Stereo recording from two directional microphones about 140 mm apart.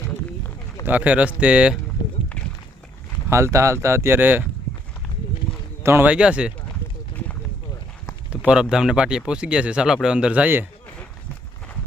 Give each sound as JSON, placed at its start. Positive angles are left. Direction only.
{"t": 0.9, "sound": "speech", "side_deg": -10}
{"t": 3.2, "sound": "speech", "side_deg": -20}
{"t": 5.8, "sound": "speech", "side_deg": -15}
{"t": 8.3, "sound": "a sound", "side_deg": -5}
{"t": 8.7, "sound": "speech", "side_deg": -5}